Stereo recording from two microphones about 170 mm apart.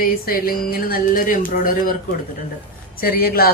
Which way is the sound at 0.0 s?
55° left (ahead or behind).